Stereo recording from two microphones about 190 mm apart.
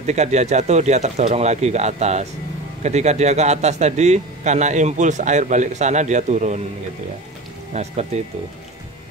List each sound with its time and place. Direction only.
0.0 s a man's voice: 35° right (ahead or behind)
7.7 s a man's voice: 35° right (ahead or behind)